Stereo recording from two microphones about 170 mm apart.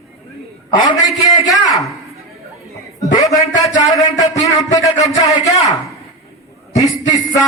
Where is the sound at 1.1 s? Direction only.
Centre (ahead or behind).